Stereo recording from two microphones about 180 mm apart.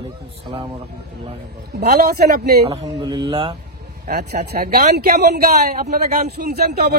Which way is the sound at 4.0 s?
60° right (ahead or behind).